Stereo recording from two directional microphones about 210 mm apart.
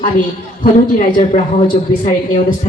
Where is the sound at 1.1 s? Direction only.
40° left (ahead or behind).